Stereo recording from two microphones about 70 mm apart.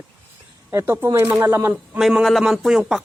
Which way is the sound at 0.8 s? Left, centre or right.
Right.